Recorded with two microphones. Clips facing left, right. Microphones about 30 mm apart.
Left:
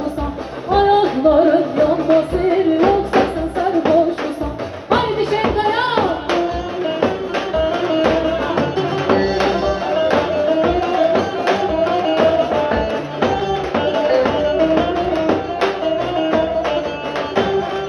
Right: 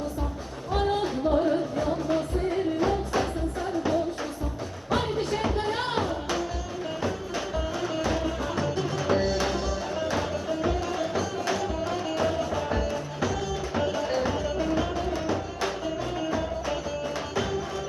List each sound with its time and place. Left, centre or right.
0.7 s music: left
7.5 s music: left